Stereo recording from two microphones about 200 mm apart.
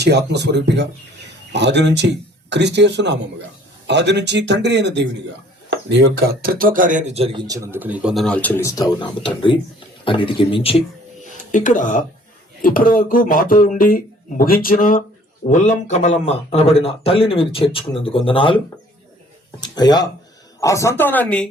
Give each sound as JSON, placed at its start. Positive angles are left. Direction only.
{"t": 0.0, "sound": "speech", "side_deg": -55}
{"t": 7.4, "sound": "speech", "side_deg": -15}
{"t": 11.5, "sound": "speech", "side_deg": 40}
{"t": 19.6, "sound": "speech", "side_deg": 20}